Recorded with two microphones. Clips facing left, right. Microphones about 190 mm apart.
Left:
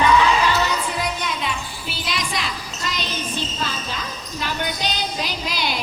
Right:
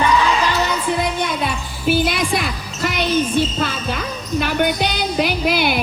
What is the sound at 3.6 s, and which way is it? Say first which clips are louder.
Jingle bell: right 6 dB; 60° right (ahead or behind).